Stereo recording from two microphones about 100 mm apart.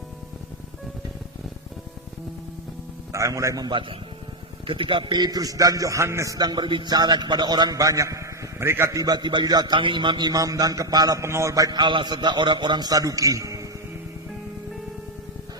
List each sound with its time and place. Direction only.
3.1 s a man's voice: 30° right (ahead or behind)
3.7 s a man's voice: 55° right (ahead or behind); by 13.7 s 35° right (ahead or behind)